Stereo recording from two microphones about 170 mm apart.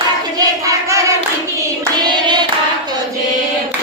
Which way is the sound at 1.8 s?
25° right (ahead or behind).